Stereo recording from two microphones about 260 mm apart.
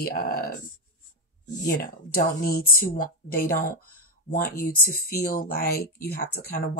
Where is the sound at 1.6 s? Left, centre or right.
Left.